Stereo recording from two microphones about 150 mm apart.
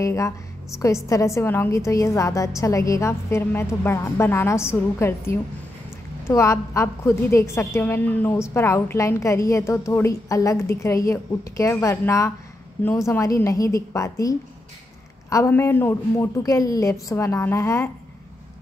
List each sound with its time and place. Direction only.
0.0 s a woman's voice: 20° left (ahead or behind)